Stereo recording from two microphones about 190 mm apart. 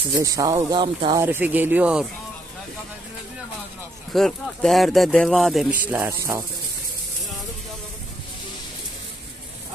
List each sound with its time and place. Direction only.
0.2 s speech: 20° right (ahead or behind)
1.2 s speech: 10° right (ahead or behind)
4.1 s speech: centre (ahead or behind); by 6.4 s 15° right (ahead or behind)